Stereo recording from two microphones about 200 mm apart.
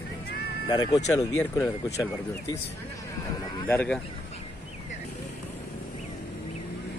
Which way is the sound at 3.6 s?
10° left (ahead or behind).